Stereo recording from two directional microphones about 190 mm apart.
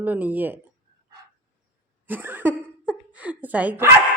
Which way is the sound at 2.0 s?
10° right (ahead or behind).